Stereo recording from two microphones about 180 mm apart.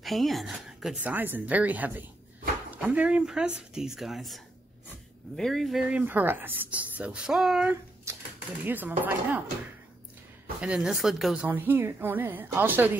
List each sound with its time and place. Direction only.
0.0 s a woman's voice: centre (ahead or behind)
8.1 s typewriter: 15° right (ahead or behind)
8.6 s a woman's voice: 10° right (ahead or behind)
10.6 s a woman's voice: 5° right (ahead or behind)